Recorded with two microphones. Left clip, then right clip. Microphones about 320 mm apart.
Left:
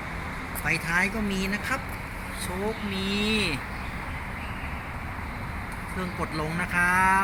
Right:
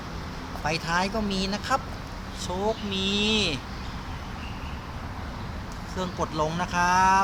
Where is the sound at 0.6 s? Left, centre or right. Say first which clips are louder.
Left 1 dB; centre.